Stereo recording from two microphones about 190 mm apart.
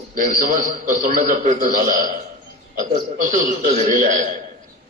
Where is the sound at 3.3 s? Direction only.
40° right (ahead or behind).